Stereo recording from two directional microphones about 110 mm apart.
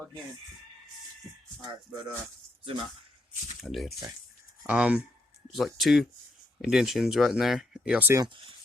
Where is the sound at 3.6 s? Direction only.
5° right (ahead or behind).